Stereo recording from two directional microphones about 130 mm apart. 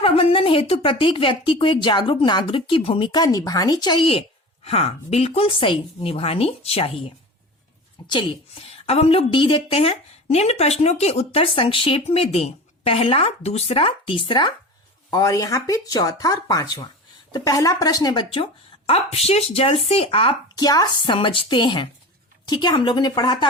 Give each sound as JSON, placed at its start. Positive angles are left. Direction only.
{"t": 0.0, "sound": "a woman's voice", "side_deg": 45}
{"t": 4.6, "sound": "a woman's voice", "side_deg": 50}
{"t": 15.1, "sound": "a woman's voice", "side_deg": 25}
{"t": 20.6, "sound": "a woman's voice", "side_deg": 30}